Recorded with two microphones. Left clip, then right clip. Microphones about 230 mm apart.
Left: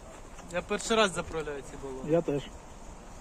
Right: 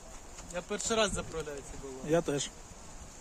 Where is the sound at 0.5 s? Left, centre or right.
Centre.